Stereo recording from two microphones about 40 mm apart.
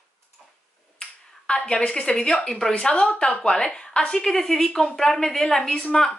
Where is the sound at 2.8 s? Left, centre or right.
Left.